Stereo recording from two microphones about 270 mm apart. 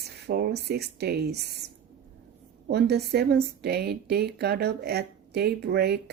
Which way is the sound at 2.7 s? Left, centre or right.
Right.